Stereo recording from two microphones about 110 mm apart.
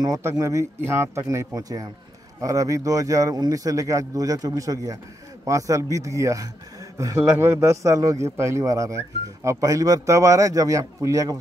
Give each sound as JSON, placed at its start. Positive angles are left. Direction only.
{"t": 0.0, "sound": "a man's voice", "side_deg": -25}